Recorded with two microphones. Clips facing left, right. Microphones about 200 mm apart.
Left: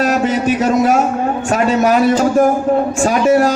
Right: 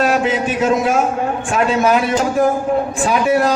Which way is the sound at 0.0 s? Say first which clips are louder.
Left 2 dB; 45° left (ahead or behind).